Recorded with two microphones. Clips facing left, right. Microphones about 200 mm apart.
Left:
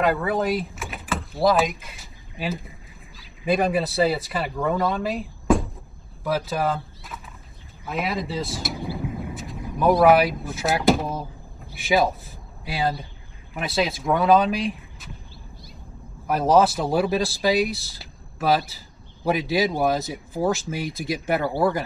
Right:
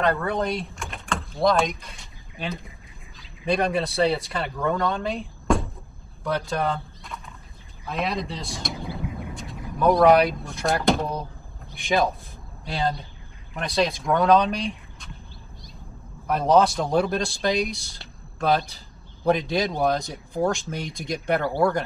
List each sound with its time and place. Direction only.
0.0 s speech: 5° left (ahead or behind)
8.8 s a sound: 5° left (ahead or behind)
11.7 s a man's voice: 5° left (ahead or behind)
16.3 s speech: 5° left (ahead or behind)